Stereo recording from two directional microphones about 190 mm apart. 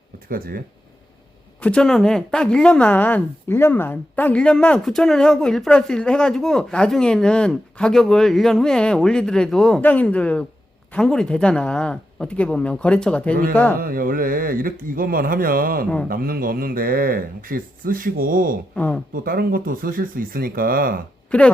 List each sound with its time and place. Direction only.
0.3 s speech: 50° right (ahead or behind)
1.6 s speech: 5° left (ahead or behind)
13.7 s speech: 50° right (ahead or behind)
21.2 s speech: 5° left (ahead or behind)